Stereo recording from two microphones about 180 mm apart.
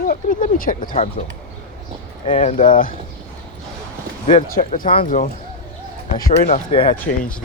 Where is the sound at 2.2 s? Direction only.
35° left (ahead or behind).